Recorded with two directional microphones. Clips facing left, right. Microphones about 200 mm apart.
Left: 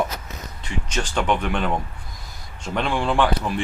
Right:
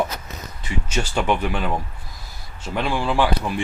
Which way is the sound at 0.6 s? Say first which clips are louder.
Right 2 dB; 10° right (ahead or behind).